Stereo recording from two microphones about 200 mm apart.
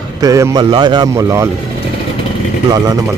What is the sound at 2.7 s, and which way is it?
Speech, 20° right (ahead or behind).